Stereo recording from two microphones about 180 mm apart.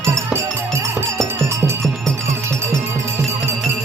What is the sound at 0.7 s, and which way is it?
Music, 15° right (ahead or behind).